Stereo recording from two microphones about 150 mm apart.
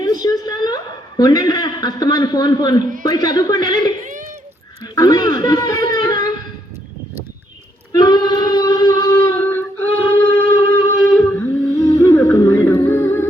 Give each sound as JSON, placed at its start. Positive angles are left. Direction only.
{"t": 0.0, "sound": "a sound", "side_deg": 25}
{"t": 3.1, "sound": "speech", "side_deg": 25}
{"t": 7.9, "sound": "singing", "side_deg": 30}